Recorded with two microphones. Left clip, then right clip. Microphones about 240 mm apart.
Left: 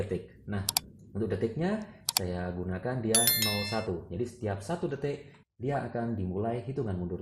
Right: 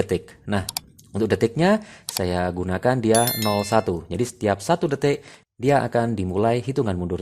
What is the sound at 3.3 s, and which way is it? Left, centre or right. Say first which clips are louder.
Speech: right 7 dB; centre.